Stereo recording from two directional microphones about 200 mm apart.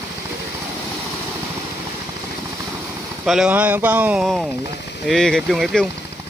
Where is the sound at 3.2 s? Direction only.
5° right (ahead or behind).